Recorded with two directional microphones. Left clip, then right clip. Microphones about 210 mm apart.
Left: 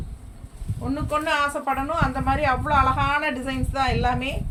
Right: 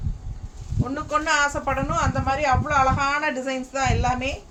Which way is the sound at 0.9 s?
15° right (ahead or behind).